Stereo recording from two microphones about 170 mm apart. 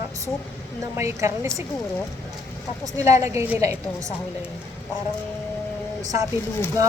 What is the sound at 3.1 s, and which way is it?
A woman's voice, 20° right (ahead or behind).